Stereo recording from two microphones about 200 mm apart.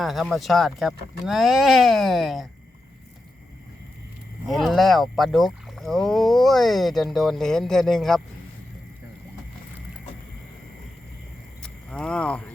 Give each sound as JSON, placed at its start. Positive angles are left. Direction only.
{"t": 0.0, "sound": "speech", "side_deg": 0}
{"t": 4.4, "sound": "speech", "side_deg": 0}
{"t": 11.6, "sound": "a sound", "side_deg": 5}